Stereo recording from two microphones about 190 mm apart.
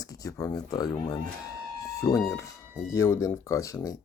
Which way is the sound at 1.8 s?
15° left (ahead or behind).